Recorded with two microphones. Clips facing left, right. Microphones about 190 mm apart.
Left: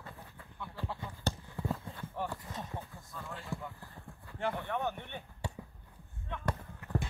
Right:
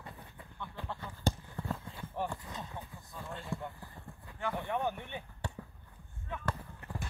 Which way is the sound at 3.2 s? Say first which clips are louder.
Right 2 dB; centre (ahead or behind).